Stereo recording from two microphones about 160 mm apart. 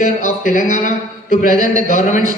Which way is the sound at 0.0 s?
50° left (ahead or behind).